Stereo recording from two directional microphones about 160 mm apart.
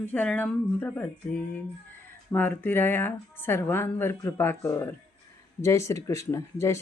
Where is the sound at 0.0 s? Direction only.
10° left (ahead or behind).